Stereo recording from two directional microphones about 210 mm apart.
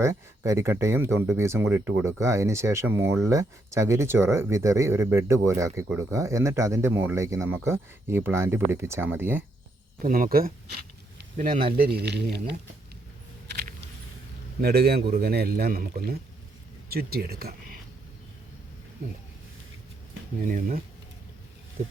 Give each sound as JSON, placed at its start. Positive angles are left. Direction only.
{"t": 0.0, "sound": "speech", "side_deg": -15}
{"t": 10.0, "sound": "speech", "side_deg": -45}
{"t": 14.6, "sound": "speech", "side_deg": -50}
{"t": 20.4, "sound": "speech", "side_deg": -40}